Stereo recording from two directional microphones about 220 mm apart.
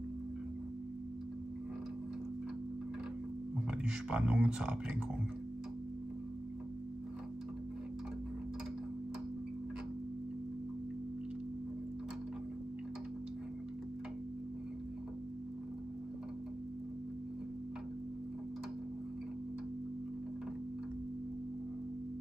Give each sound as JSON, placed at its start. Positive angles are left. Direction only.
{"t": 3.8, "sound": "speech", "side_deg": -5}